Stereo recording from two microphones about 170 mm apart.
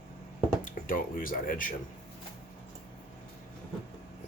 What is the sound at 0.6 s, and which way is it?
Speech, 55° left (ahead or behind).